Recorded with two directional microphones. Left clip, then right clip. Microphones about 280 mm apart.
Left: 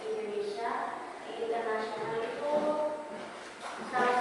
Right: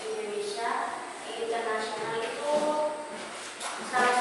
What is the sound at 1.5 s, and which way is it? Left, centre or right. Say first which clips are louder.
Music: right 2 dB; centre.